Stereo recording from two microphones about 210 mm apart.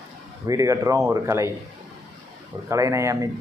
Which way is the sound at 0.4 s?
15° right (ahead or behind).